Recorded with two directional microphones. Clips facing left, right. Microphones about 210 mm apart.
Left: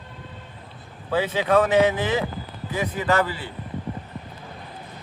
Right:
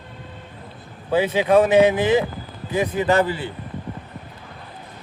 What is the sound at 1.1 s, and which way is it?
Speech, 15° right (ahead or behind).